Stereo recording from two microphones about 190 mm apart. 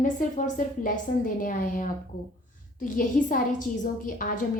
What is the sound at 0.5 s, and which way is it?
A woman's voice, 45° left (ahead or behind).